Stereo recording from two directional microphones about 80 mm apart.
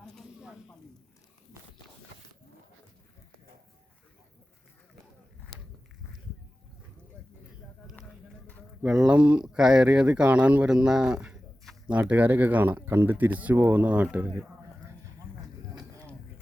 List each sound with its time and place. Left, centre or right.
0.0 s snake: centre
0.3 s snake: centre
8.8 s speech: centre